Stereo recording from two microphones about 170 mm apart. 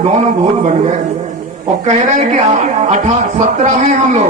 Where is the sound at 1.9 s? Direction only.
45° right (ahead or behind).